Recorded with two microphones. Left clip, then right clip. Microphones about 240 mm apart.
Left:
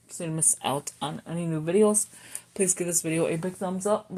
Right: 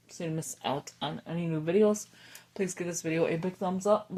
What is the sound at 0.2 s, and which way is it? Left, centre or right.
Speech, left.